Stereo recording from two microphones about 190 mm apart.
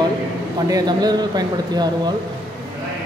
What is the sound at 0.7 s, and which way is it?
Speech, 20° right (ahead or behind).